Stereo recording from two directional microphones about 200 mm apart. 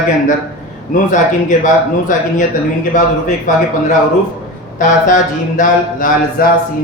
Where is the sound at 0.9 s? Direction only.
40° left (ahead or behind).